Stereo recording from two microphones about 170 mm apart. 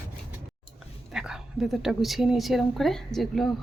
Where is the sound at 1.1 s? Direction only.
5° right (ahead or behind).